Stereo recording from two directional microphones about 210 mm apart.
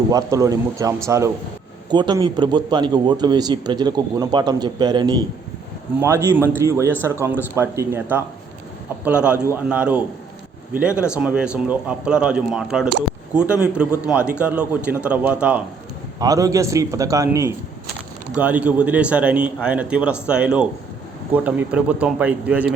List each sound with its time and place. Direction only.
0.1 s a man's voice: 15° right (ahead or behind)